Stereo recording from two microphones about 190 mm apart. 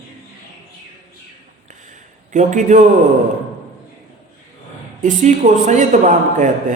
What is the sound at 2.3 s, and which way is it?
Speech, 40° right (ahead or behind).